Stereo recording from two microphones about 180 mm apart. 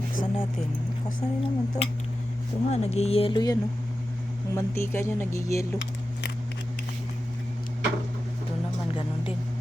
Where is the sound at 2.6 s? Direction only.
35° left (ahead or behind); by 5.4 s 15° left (ahead or behind).